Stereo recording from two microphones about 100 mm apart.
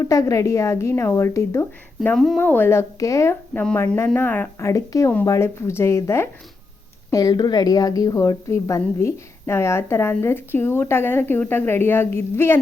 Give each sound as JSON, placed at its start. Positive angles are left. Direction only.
{"t": 0.0, "sound": "a woman's voice", "side_deg": 35}
{"t": 2.1, "sound": "speech", "side_deg": 5}
{"t": 2.4, "sound": "a woman's voice", "side_deg": 20}
{"t": 3.5, "sound": "speech", "side_deg": 10}
{"t": 3.9, "sound": "a woman's voice", "side_deg": 25}
{"t": 4.6, "sound": "a woman's voice", "side_deg": 35}